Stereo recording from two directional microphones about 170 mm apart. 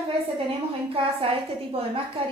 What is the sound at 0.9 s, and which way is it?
A woman's voice, 35° right (ahead or behind).